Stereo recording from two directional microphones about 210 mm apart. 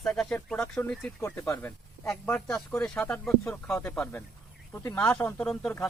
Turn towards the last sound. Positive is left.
turn(degrees=5)  # may be behind; listen again after turning